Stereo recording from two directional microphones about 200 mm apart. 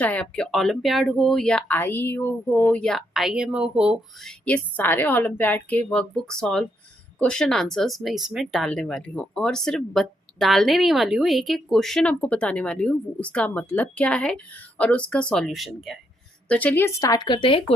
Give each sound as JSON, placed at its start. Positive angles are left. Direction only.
{"t": 0.0, "sound": "speech", "side_deg": 5}